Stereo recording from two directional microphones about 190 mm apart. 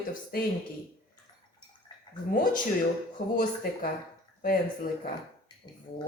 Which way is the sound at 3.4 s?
50° left (ahead or behind).